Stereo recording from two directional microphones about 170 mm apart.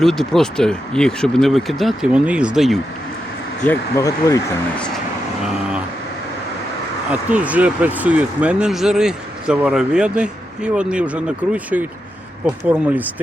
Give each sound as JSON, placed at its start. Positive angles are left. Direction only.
{"t": 0.0, "sound": "speech", "side_deg": 0}
{"t": 3.6, "sound": "speech", "side_deg": 15}
{"t": 7.1, "sound": "speech", "side_deg": -10}